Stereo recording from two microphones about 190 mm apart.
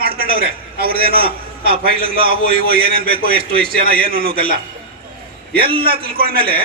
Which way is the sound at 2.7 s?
50° right (ahead or behind).